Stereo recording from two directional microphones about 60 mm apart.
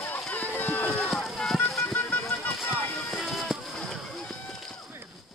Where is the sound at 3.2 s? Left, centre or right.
Centre.